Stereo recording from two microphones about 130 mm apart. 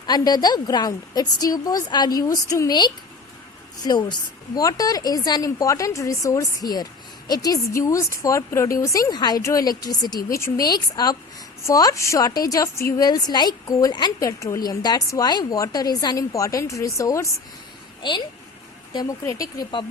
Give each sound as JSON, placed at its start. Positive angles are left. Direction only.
{"t": 0.0, "sound": "a woman's voice", "side_deg": 30}
{"t": 18.9, "sound": "a woman's voice", "side_deg": 25}